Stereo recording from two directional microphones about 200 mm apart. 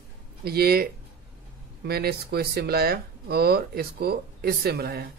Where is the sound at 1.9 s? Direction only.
50° right (ahead or behind).